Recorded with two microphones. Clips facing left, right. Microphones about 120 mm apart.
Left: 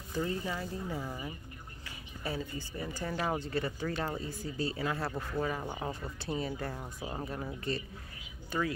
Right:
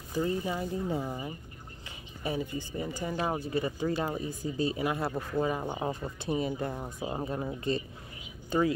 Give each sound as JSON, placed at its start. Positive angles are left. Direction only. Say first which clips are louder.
{"t": 0.1, "sound": "speech", "louder": "right 4 dB", "side_deg": -20}